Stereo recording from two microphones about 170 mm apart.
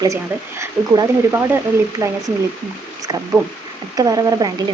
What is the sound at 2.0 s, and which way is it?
Speech, 20° right (ahead or behind).